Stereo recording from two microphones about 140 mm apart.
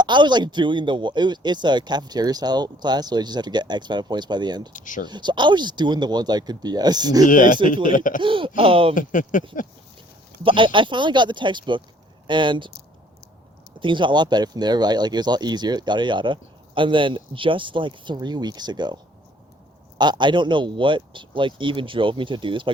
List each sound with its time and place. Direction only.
0.0 s speech: 35° right (ahead or behind)
4.7 s speech: 65° left (ahead or behind)
5.0 s speech: 30° right (ahead or behind)
7.3 s speech: 70° left (ahead or behind)
8.2 s speech: 35° right (ahead or behind)
9.0 s speech: 70° left (ahead or behind)
10.4 s speech: 35° right (ahead or behind)
13.7 s speech: 35° right (ahead or behind)
20.0 s speech: 30° right (ahead or behind)